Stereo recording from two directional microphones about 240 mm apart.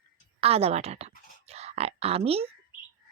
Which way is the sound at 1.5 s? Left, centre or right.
Right.